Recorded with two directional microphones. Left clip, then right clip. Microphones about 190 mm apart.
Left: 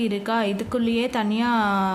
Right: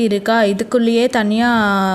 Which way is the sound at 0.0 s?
30° right (ahead or behind).